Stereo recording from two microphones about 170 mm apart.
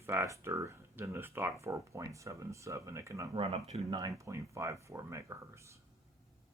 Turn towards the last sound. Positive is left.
turn(degrees=-15)  # may be behind; listen again after turning